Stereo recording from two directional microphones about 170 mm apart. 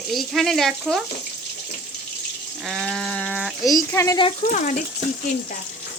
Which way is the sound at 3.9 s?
15° left (ahead or behind).